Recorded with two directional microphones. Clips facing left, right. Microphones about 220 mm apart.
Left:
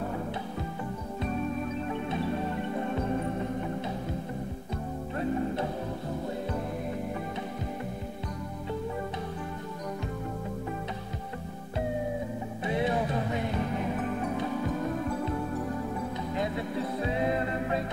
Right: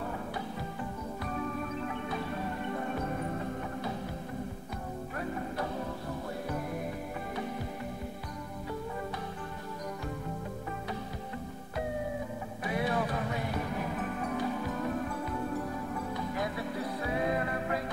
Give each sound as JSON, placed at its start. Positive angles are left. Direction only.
{"t": 12.6, "sound": "music", "side_deg": 25}
{"t": 16.3, "sound": "music", "side_deg": 25}